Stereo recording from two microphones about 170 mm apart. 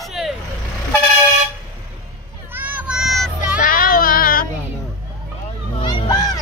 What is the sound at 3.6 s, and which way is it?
Music, 55° left (ahead or behind).